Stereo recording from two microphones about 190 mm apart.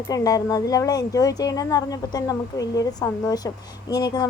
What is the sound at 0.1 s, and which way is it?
Speech, 20° left (ahead or behind).